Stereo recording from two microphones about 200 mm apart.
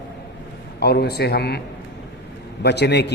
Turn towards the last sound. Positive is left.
turn(degrees=55)  # may be behind; listen again after turning